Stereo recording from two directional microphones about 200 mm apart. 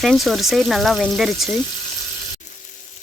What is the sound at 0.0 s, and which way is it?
Frying, centre (ahead or behind).